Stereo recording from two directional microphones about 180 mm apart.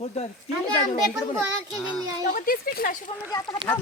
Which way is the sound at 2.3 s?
55° left (ahead or behind).